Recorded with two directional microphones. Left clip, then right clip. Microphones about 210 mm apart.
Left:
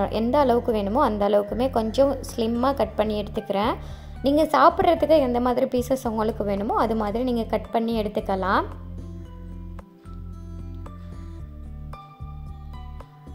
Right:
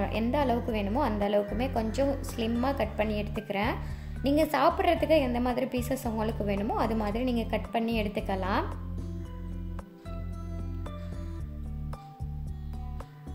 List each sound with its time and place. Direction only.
0.0 s a woman's voice: 25° left (ahead or behind)